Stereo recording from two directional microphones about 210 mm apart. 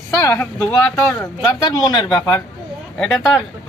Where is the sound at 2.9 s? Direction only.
5° left (ahead or behind).